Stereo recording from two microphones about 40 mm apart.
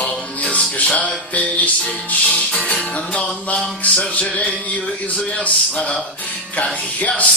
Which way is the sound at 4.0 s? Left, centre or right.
Left.